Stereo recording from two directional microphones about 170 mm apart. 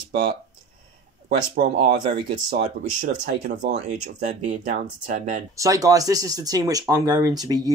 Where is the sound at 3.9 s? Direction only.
45° right (ahead or behind).